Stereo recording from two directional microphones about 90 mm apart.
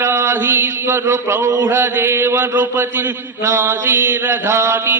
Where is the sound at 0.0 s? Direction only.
30° right (ahead or behind).